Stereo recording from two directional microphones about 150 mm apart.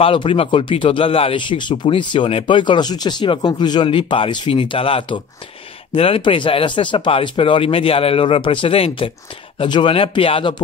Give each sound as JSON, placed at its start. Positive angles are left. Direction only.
{"t": 0.0, "sound": "speech", "side_deg": 35}